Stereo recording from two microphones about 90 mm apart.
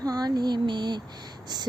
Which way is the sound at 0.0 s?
45° right (ahead or behind).